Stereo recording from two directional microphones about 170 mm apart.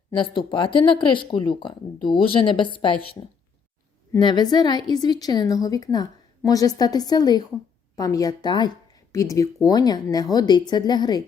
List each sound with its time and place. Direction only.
0.1 s a woman's voice: 25° left (ahead or behind)